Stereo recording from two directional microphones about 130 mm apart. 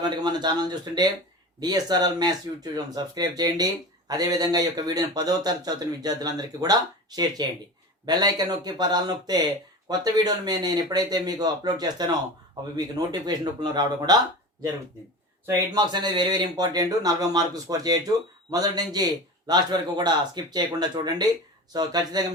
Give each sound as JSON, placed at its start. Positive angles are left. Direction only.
{"t": 0.0, "sound": "a man's voice", "side_deg": -35}
{"t": 13.2, "sound": "speech", "side_deg": -30}
{"t": 15.4, "sound": "speech", "side_deg": -35}